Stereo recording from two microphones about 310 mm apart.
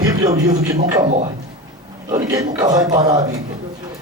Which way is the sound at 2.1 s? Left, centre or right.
Centre.